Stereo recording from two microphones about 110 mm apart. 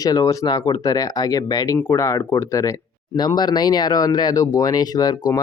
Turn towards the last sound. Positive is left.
turn(degrees=35)  # may be behind; listen again after turning